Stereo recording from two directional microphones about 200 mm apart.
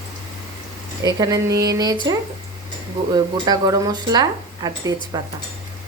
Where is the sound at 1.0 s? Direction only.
15° right (ahead or behind).